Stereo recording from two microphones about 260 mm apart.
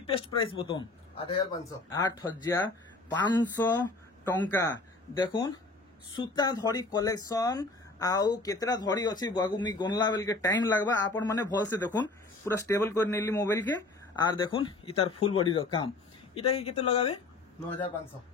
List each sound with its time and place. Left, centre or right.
0.0 s speech: left